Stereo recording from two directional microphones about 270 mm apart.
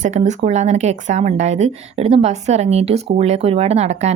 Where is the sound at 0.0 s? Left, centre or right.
Right.